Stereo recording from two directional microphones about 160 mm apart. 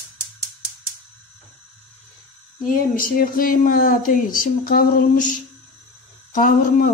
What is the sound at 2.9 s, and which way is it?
Speech, 65° left (ahead or behind).